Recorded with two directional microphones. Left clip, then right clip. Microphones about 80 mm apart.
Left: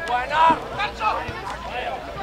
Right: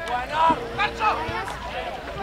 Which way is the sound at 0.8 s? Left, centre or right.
Centre.